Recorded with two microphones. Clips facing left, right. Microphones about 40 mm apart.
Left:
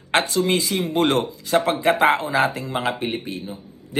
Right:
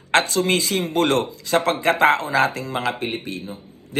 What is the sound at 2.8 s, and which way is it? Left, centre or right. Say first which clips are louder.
A man's voice: left 1 dB; right.